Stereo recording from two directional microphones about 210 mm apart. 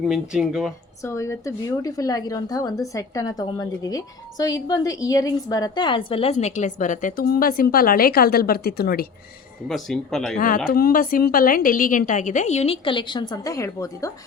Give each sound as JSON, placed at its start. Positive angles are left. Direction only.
{"t": 0.1, "sound": "speech", "side_deg": 0}
{"t": 1.0, "sound": "a woman's voice", "side_deg": 15}
{"t": 9.6, "sound": "speech", "side_deg": 5}
{"t": 10.3, "sound": "a woman's voice", "side_deg": 40}